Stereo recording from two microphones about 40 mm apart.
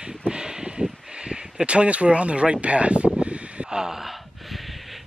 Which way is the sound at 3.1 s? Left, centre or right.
Right.